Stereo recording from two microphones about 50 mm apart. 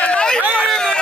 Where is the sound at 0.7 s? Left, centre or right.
Centre.